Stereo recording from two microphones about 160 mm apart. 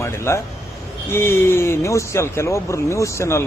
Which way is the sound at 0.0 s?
15° left (ahead or behind).